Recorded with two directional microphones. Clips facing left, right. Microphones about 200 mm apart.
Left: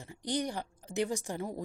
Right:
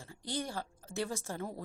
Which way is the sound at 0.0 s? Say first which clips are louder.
Left 5 dB; 20° left (ahead or behind).